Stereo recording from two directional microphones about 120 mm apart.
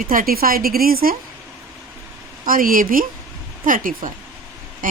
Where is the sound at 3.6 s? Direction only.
90° right.